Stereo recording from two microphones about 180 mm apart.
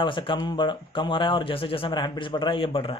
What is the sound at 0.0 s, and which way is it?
Speech, 25° left (ahead or behind).